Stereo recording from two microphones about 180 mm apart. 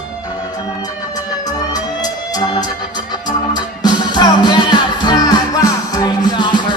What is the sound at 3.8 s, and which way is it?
Music, 25° left (ahead or behind).